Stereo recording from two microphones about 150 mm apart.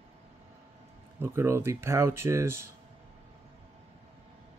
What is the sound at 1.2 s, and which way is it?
Speech, 15° right (ahead or behind).